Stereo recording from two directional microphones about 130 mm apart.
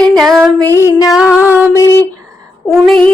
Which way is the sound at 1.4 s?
15° right (ahead or behind).